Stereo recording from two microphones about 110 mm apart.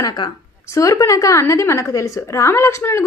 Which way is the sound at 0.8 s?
30° left (ahead or behind).